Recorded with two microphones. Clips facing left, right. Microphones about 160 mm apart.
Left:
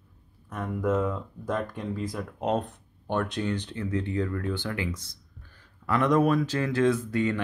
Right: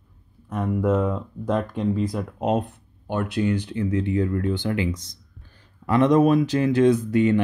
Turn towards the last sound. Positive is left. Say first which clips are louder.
# right 8 dB
turn(degrees=-20)  # may be behind; listen again after turning